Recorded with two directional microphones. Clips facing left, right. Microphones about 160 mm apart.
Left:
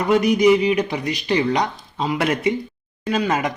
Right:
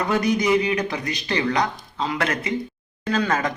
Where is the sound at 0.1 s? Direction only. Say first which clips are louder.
Left 6 dB; 15° left (ahead or behind).